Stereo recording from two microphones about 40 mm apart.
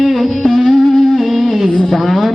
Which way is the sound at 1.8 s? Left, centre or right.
Centre.